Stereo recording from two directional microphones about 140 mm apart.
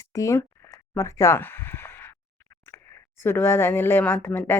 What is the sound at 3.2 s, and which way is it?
Speech, 15° left (ahead or behind).